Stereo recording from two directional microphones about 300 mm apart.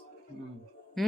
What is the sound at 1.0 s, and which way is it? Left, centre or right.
Speech, centre.